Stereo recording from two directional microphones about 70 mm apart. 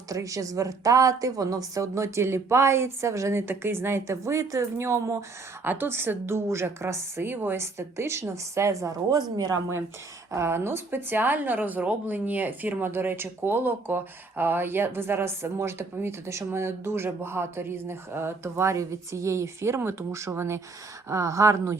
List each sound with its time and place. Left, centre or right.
0.1 s a woman's voice: right
3.4 s a woman's voice: right
5.6 s a woman's voice: right
9.1 s speech: right
10.3 s a woman's voice: right